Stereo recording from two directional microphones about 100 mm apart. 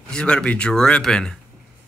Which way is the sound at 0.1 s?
10° left (ahead or behind).